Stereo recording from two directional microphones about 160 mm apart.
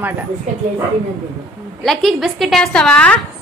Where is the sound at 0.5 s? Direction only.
50° right (ahead or behind).